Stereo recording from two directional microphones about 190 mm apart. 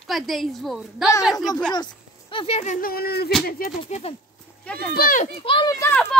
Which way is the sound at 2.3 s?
30° left (ahead or behind).